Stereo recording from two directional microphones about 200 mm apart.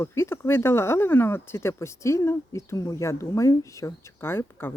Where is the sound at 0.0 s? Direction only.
15° left (ahead or behind).